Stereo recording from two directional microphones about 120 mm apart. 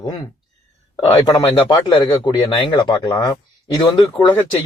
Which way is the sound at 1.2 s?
35° left (ahead or behind).